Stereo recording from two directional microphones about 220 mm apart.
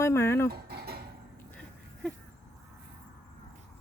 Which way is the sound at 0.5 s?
45° right (ahead or behind).